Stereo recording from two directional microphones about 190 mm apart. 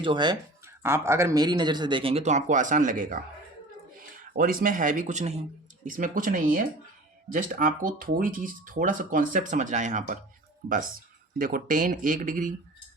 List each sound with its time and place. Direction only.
0.0 s speech: 25° right (ahead or behind)
0.8 s speech: 15° right (ahead or behind); by 3.2 s 45° right (ahead or behind)
4.4 s speech: 50° right (ahead or behind)
11.3 s speech: 45° right (ahead or behind)